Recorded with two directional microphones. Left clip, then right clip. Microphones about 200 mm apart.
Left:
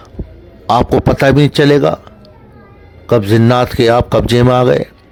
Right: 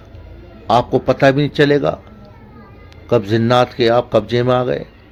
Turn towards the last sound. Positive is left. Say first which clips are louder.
# left 6 dB
turn(degrees=60)  # may be behind; listen again after turning